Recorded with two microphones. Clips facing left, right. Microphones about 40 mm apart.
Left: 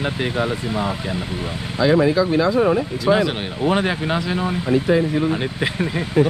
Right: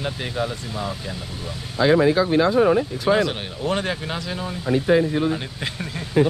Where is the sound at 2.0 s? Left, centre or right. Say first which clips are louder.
Left 1 dB; right.